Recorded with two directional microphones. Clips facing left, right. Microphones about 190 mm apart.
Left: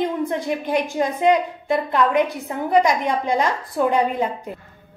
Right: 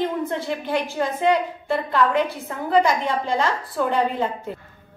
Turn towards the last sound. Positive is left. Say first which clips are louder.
# left 3 dB
turn(degrees=15)  # may be behind; listen again after turning